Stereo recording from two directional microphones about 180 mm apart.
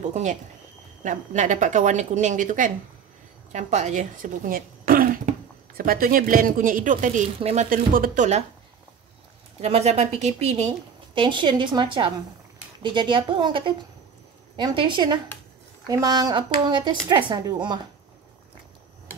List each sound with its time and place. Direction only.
0.1 s a woman's voice: 40° right (ahead or behind)
7.3 s a woman's voice: 35° right (ahead or behind)
7.7 s a woman's voice: 50° right (ahead or behind)
9.6 s a woman's voice: 35° right (ahead or behind)
11.1 s speech: 25° right (ahead or behind)